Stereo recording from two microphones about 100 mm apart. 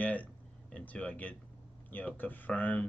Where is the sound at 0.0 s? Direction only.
15° left (ahead or behind).